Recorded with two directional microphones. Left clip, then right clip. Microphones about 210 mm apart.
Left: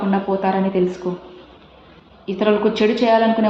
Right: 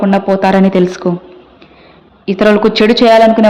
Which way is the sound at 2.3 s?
55° right (ahead or behind).